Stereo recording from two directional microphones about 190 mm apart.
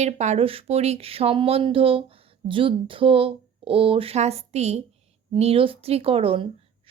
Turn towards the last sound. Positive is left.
turn(degrees=-30)  # may be behind; listen again after turning